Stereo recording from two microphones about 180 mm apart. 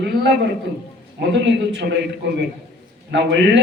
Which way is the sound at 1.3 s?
80° right.